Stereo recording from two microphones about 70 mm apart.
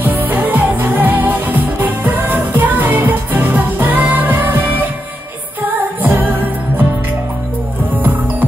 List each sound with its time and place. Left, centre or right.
0.0 s music: right
8.0 s music: right